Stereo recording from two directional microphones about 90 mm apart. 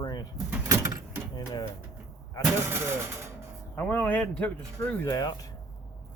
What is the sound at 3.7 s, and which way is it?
Speech, 20° left (ahead or behind).